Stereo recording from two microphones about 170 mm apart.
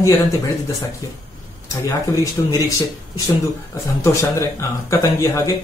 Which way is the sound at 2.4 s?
20° left (ahead or behind).